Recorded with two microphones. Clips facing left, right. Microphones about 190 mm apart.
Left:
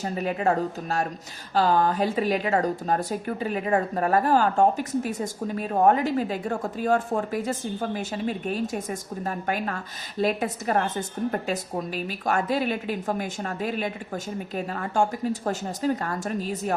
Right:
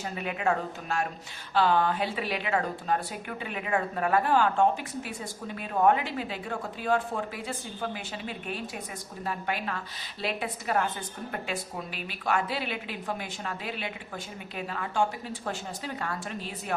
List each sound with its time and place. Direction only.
0.0 s a woman's voice: 40° left (ahead or behind)